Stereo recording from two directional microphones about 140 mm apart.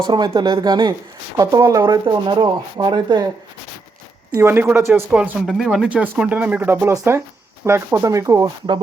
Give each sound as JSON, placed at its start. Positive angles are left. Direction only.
{"t": 0.1, "sound": "speech", "side_deg": -30}
{"t": 4.4, "sound": "speech", "side_deg": -15}